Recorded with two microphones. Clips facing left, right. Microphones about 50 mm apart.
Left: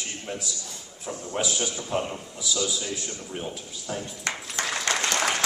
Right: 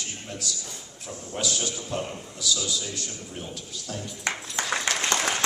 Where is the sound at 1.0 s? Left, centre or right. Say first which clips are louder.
Left 2 dB; centre.